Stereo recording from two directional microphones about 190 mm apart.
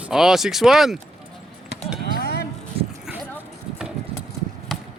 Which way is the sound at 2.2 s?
55° left (ahead or behind).